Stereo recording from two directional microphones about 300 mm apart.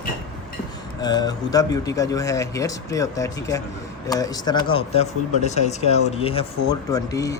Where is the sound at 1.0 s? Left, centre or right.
Centre.